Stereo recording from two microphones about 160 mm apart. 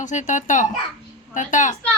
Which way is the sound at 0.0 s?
50° left (ahead or behind).